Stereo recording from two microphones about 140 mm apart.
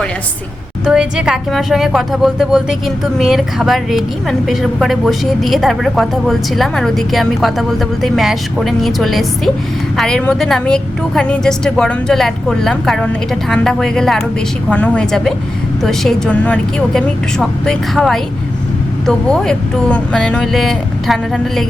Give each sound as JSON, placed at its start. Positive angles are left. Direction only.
{"t": 0.9, "sound": "a woman's voice", "side_deg": -5}